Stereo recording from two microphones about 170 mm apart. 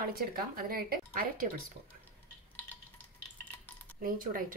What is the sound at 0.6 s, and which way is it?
Speech, 60° right (ahead or behind).